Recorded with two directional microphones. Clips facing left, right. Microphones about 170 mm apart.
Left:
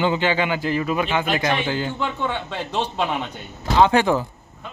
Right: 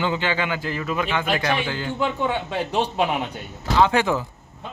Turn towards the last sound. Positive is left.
turn(degrees=30)  # may be behind; listen again after turning